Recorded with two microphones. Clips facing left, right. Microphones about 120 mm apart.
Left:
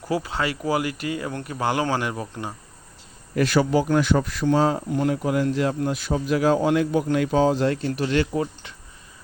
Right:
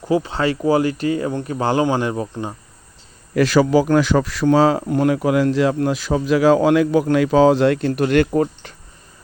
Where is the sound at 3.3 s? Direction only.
90° right.